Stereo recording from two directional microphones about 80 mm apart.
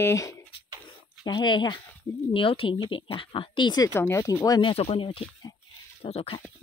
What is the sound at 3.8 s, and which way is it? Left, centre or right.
Speech, left.